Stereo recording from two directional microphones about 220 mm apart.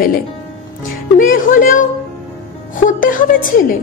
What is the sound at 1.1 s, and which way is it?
A child's voice, 40° left (ahead or behind).